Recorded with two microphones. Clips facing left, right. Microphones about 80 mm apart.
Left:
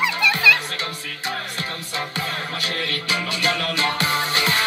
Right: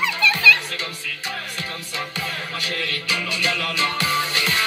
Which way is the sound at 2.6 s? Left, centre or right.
Left.